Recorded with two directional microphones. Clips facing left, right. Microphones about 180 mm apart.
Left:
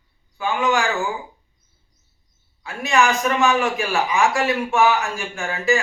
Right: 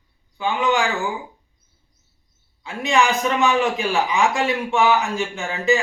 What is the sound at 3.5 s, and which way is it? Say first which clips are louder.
Music: right 1 dB; 25° right (ahead or behind).